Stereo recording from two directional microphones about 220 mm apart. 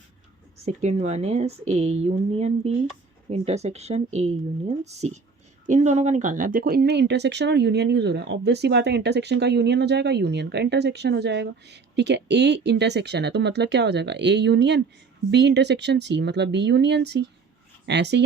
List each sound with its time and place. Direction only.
0.6 s speech: 30° right (ahead or behind); by 18.2 s 50° right (ahead or behind)